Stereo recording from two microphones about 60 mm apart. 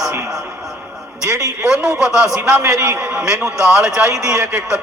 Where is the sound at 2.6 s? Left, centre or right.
Right.